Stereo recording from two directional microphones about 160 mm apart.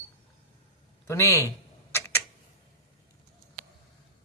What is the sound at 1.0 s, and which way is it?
Speech, 20° left (ahead or behind).